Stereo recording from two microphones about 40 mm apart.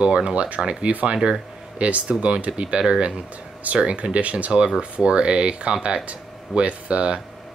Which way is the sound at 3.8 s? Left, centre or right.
Right.